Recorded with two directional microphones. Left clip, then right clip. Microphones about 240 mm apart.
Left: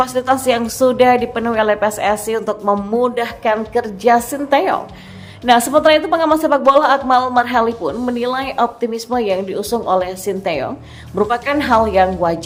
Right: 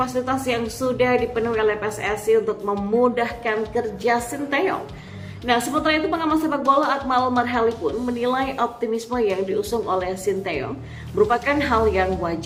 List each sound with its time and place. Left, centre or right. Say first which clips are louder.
0.0 s a woman's voice: left 8 dB; left